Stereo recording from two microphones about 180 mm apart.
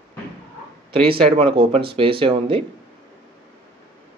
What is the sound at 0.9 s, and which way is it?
Speech, 30° right (ahead or behind).